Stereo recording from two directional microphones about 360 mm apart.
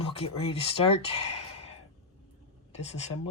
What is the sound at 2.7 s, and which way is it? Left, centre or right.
Speech, centre.